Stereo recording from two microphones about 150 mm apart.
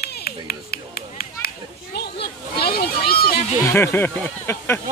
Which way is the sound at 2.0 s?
90° left.